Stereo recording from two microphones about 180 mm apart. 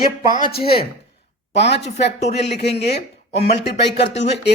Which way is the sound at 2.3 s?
65° left (ahead or behind).